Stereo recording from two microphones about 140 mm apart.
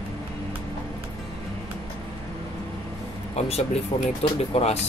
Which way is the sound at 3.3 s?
50° left (ahead or behind).